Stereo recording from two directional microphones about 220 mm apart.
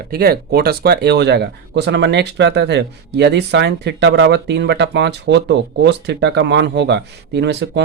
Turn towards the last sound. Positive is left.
turn(degrees=-50)  # may be behind; listen again after turning